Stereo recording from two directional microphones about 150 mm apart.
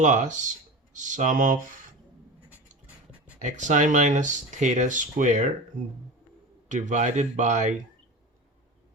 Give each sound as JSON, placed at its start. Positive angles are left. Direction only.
{"t": 0.0, "sound": "speech", "side_deg": -55}
{"t": 2.5, "sound": "a sound", "side_deg": -10}
{"t": 3.4, "sound": "speech", "side_deg": -55}
{"t": 6.7, "sound": "speech", "side_deg": -55}